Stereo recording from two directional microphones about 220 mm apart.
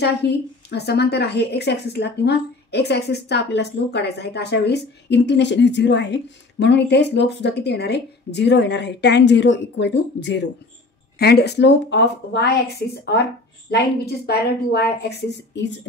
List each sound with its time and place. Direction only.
0.0 s a woman's voice: 50° left (ahead or behind)